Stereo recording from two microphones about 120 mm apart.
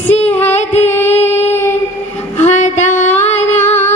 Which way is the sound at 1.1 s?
65° left (ahead or behind).